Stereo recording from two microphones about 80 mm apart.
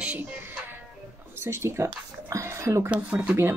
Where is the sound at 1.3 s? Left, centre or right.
Right.